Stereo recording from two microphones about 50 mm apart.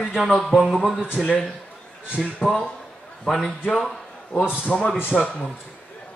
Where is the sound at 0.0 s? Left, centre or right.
Centre.